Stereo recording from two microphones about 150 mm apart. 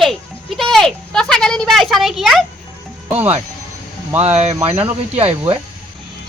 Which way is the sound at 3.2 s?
45° right (ahead or behind).